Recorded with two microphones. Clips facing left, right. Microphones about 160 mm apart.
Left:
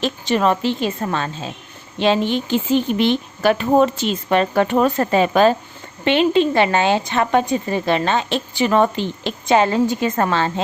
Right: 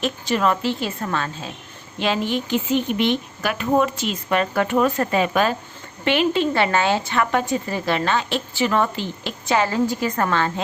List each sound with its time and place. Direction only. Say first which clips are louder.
0.0 s a woman's voice: left 3 dB; 25° left (ahead or behind)